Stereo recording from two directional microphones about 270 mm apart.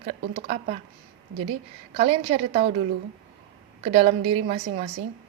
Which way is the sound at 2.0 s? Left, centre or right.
Right.